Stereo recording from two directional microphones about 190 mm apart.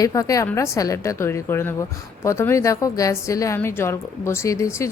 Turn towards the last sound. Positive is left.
turn(degrees=15)  # may be behind; listen again after turning